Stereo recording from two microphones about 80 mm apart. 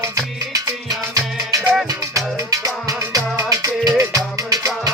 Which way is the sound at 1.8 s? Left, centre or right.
Right.